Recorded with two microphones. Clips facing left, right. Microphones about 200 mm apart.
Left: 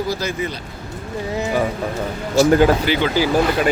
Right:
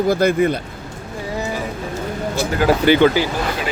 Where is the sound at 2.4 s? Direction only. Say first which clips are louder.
Left 5 dB; 55° right (ahead or behind).